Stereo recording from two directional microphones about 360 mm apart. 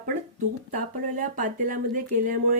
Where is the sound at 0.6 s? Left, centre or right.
Right.